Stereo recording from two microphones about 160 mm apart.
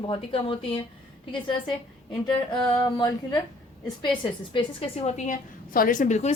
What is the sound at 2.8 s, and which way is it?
Speech, 25° left (ahead or behind).